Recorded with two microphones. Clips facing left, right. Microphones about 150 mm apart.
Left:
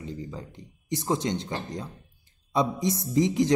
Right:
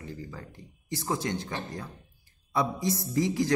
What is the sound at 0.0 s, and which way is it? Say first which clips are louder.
A man's voice: left 4 dB; 20° left (ahead or behind).